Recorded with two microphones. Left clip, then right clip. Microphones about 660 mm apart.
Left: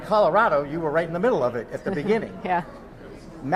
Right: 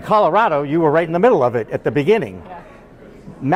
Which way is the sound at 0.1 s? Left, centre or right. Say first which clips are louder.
Right 5 dB; right.